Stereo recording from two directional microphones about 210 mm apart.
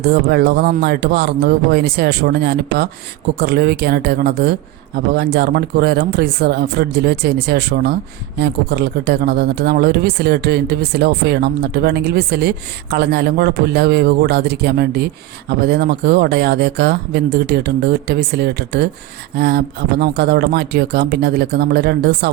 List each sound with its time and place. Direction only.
0.0 s speech: 50° right (ahead or behind)